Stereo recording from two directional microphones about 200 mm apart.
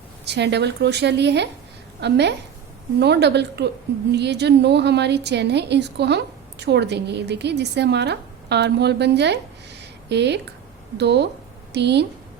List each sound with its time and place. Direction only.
0.3 s a woman's voice: 60° right (ahead or behind)